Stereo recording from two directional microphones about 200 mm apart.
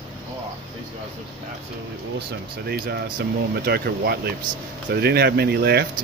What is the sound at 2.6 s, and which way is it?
Speech, 50° right (ahead or behind).